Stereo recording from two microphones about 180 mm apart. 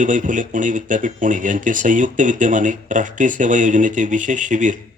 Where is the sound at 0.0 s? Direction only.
45° right (ahead or behind).